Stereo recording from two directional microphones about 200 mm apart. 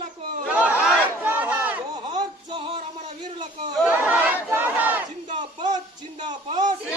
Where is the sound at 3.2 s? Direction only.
20° right (ahead or behind).